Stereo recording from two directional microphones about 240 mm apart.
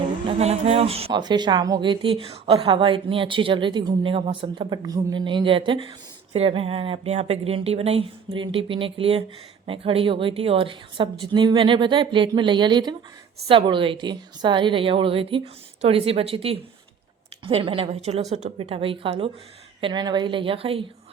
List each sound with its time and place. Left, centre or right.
0.3 s speech: right